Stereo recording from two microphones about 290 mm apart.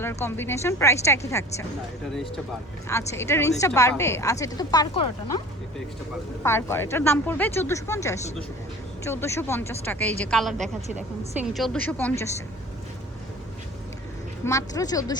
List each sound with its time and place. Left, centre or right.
0.0 s speech: centre
3.1 s speech: centre
6.4 s speech: centre
10.8 s speech: right
11.3 s a woman's voice: centre
14.4 s speech: centre